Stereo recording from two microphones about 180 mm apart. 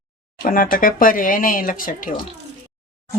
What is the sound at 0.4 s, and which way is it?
Speech, 50° left (ahead or behind).